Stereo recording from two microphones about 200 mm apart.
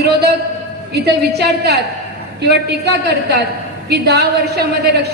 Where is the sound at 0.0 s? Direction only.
55° right (ahead or behind).